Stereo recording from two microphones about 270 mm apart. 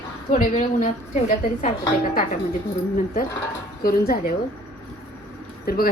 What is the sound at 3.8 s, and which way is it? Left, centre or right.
Speech, left.